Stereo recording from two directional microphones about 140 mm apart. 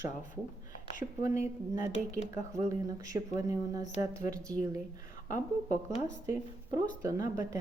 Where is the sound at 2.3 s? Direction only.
25° right (ahead or behind).